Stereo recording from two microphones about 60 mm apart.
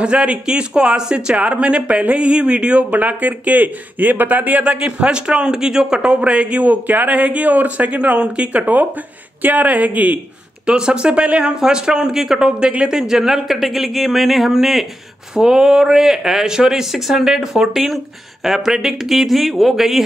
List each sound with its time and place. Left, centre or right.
0.0 s speech: centre